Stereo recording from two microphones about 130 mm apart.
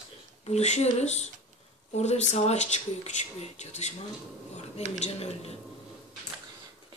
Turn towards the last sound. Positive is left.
turn(degrees=50)  # may be behind; listen again after turning